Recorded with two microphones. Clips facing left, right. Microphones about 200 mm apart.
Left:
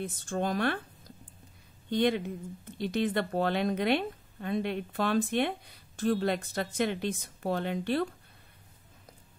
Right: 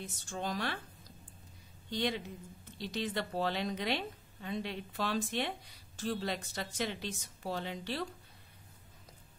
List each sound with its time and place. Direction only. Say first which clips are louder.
0.0 s a woman's voice: left 8 dB; 55° left (ahead or behind)
1.9 s a woman's voice: left 8 dB; 55° left (ahead or behind)